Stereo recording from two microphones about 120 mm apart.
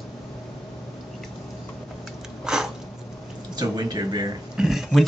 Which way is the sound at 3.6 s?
35° right (ahead or behind).